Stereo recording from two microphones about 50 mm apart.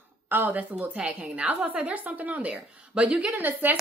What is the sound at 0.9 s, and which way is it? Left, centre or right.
A woman's voice, right.